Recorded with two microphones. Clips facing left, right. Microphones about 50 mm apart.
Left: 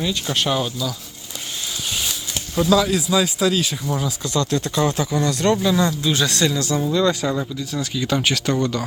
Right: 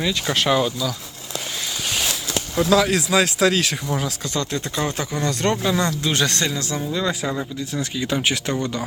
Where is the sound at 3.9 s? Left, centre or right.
Right.